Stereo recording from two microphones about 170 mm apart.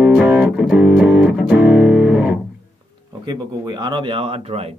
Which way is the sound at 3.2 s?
25° right (ahead or behind).